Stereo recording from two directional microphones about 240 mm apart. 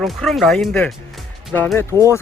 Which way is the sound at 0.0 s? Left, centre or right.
Centre.